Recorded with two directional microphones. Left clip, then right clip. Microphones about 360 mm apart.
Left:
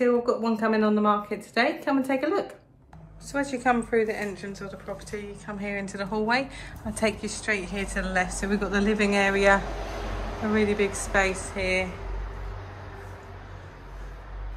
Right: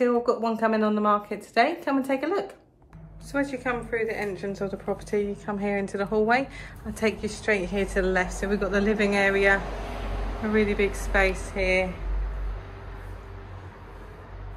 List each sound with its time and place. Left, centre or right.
0.0 s speech: centre
3.3 s a woman's voice: centre